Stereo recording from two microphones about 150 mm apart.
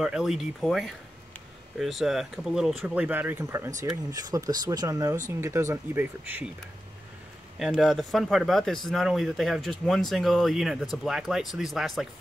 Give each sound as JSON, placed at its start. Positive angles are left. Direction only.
{"t": 0.0, "sound": "speech", "side_deg": -5}
{"t": 7.5, "sound": "speech", "side_deg": -5}